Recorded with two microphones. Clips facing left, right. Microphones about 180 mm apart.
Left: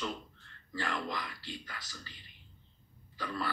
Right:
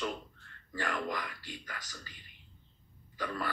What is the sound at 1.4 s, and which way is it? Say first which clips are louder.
Speech: even; 45° right (ahead or behind).